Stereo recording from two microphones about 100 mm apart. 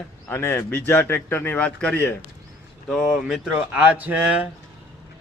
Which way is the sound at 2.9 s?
Centre (ahead or behind).